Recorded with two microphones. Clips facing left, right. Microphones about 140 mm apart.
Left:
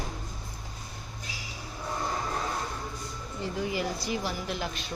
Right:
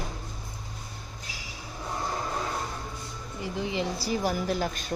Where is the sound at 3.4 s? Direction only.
20° right (ahead or behind); by 4.9 s 45° right (ahead or behind).